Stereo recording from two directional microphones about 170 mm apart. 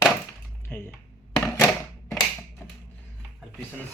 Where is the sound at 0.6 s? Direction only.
5° left (ahead or behind).